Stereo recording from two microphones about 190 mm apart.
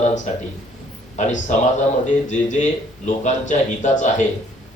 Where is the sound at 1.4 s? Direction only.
40° left (ahead or behind).